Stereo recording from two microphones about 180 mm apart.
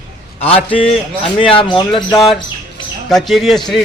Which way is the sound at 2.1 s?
Centre (ahead or behind).